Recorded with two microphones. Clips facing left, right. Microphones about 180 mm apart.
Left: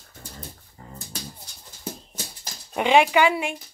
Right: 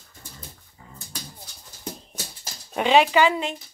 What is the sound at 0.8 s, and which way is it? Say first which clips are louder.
Dog: left 4 dB; 50° left (ahead or behind).